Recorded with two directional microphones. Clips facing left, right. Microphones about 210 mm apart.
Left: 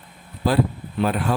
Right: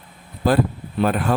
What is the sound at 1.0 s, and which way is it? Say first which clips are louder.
Speech: right 2 dB; 50° right (ahead or behind).